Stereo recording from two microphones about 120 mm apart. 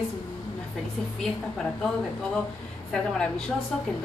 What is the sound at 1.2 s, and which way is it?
Speech, 5° left (ahead or behind).